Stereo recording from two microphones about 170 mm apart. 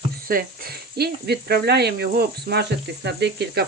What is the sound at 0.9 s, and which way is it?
Speech, 70° right (ahead or behind).